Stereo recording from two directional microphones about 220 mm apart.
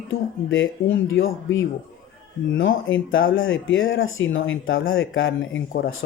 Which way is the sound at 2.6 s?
60° left (ahead or behind).